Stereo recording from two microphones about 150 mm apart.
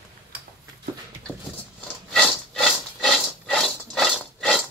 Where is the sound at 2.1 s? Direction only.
Centre (ahead or behind).